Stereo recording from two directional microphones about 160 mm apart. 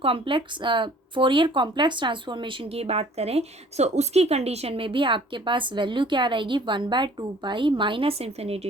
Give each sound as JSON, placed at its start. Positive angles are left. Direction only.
{"t": 0.0, "sound": "speech", "side_deg": -35}